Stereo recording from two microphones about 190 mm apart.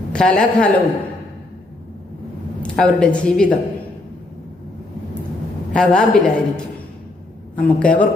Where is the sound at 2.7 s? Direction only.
5° left (ahead or behind).